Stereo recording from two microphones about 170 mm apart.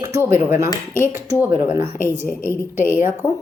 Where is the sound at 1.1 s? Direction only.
15° right (ahead or behind).